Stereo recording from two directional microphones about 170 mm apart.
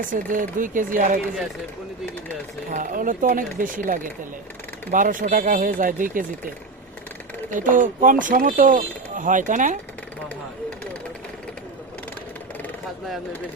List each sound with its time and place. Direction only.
0.3 s speech: 50° right (ahead or behind)
2.6 s speech: 50° right (ahead or behind)
7.5 s speech: 50° right (ahead or behind)